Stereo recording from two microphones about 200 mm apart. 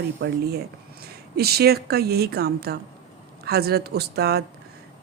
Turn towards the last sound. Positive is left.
turn(degrees=-55)  # may be behind; listen again after turning